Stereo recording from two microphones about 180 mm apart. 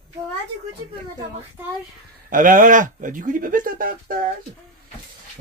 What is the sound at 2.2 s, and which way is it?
Speech, 50° right (ahead or behind).